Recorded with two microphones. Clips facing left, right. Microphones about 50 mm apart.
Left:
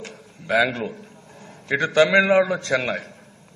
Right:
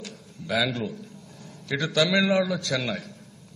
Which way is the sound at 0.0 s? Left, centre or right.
Left.